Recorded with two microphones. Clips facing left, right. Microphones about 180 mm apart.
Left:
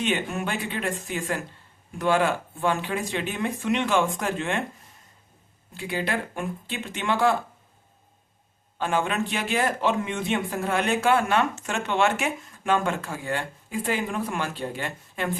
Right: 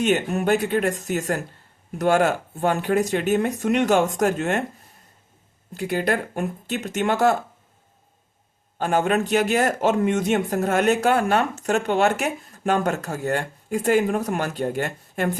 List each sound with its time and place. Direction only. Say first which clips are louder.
0.0 s speech: right 6 dB; 45° right (ahead or behind)
5.7 s speech: right 5 dB; 45° right (ahead or behind)
8.8 s speech: right 5 dB; 45° right (ahead or behind)